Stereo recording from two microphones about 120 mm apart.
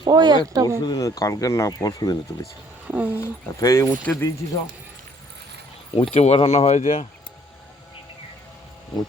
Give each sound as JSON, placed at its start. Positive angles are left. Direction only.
{"t": 0.0, "sound": "speech", "side_deg": -35}
{"t": 0.9, "sound": "speech", "side_deg": 30}
{"t": 2.8, "sound": "speech", "side_deg": -15}
{"t": 3.2, "sound": "speech", "side_deg": 25}
{"t": 4.1, "sound": "speech", "side_deg": 15}
{"t": 5.9, "sound": "speech", "side_deg": 60}